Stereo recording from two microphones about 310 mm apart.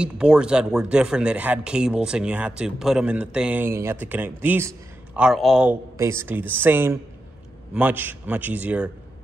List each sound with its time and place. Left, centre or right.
0.0 s speech: centre